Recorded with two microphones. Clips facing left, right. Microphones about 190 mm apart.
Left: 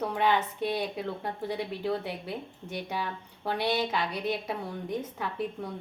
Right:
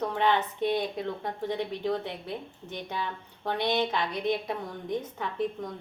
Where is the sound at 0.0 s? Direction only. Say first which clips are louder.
Right 1 dB; 10° left (ahead or behind).